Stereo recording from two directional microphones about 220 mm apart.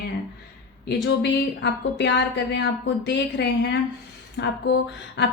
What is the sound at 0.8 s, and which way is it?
A woman's voice, 50° left (ahead or behind).